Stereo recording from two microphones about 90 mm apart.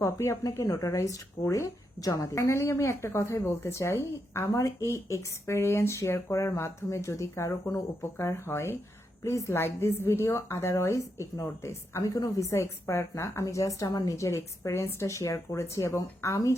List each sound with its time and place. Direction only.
0.0 s speech: 35° left (ahead or behind)